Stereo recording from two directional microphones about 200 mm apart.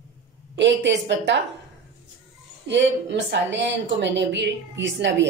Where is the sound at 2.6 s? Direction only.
60° right (ahead or behind).